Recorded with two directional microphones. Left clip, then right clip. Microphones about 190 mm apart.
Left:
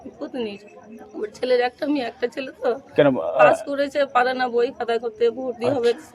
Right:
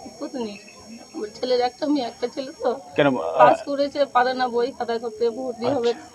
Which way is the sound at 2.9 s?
85° left.